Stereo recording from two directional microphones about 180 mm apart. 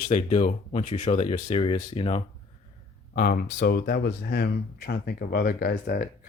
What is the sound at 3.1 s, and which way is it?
Speech, 55° left (ahead or behind).